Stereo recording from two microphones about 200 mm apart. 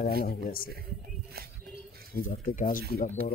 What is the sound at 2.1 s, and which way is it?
Speech, 45° left (ahead or behind).